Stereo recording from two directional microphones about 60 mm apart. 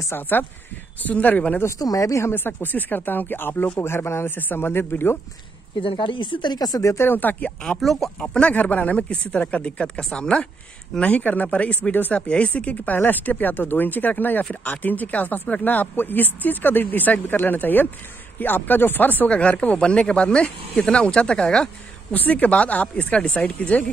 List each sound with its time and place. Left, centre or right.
0.1 s speech: left
1.8 s speech: left
2.2 s speech: left
6.6 s speech: left
7.1 s speech: left
7.8 s speech: centre
8.2 s speech: centre
12.2 s speech: centre
19.3 s speech: centre
22.1 s speech: left